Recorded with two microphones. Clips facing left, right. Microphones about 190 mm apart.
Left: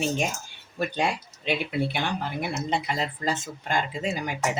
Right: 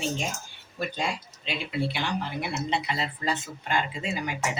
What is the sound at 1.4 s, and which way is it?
Speech, 55° left (ahead or behind).